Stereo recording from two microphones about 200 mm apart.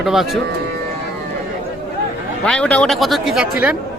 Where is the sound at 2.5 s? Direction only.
5° left (ahead or behind).